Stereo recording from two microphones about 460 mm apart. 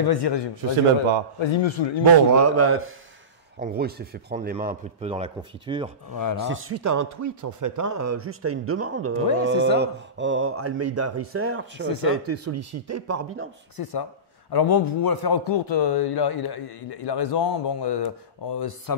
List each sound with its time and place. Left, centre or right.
0.0 s a man's voice: left
1.4 s a man's voice: left
2.3 s speech: right
3.5 s a man's voice: centre
6.1 s speech: left
6.5 s speech: right
13.8 s a man's voice: left